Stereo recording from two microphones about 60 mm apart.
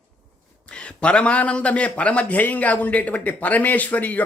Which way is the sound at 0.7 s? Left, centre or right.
Centre.